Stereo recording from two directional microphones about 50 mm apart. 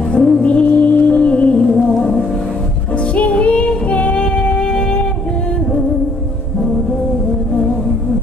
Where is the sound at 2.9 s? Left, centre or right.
Left.